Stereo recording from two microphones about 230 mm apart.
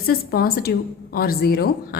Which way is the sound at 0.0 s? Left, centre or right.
Left.